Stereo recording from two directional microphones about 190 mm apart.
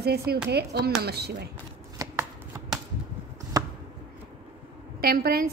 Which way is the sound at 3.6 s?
20° right (ahead or behind).